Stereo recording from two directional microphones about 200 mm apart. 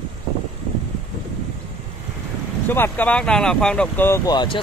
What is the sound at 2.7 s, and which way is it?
Speech, 10° left (ahead or behind).